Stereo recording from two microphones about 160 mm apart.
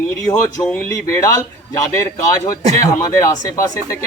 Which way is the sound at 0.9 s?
20° left (ahead or behind).